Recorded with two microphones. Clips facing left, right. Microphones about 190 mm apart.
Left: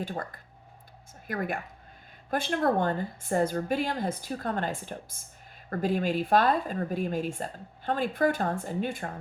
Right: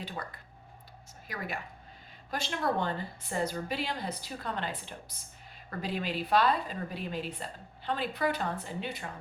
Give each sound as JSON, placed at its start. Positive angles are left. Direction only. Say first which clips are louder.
{"t": 0.0, "sound": "speech", "louder": "left 6 dB", "side_deg": 50}